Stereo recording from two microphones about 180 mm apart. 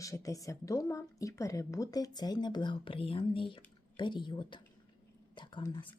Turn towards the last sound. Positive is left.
turn(degrees=25)  # may be behind; listen again after turning